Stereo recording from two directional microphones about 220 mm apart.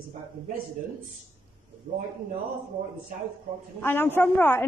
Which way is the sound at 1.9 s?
40° right (ahead or behind).